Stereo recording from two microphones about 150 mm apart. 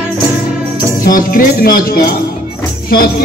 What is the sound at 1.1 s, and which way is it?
Music, 75° left (ahead or behind).